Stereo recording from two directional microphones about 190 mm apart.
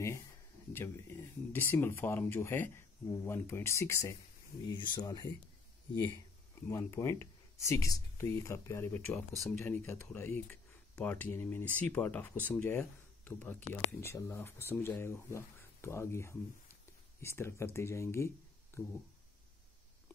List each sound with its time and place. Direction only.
0.7 s speech: 10° left (ahead or behind)
6.7 s speech: 15° left (ahead or behind)